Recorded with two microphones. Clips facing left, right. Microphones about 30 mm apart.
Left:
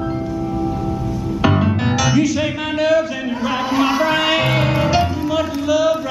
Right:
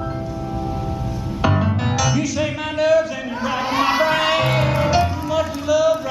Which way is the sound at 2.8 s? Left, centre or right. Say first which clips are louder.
Even; centre.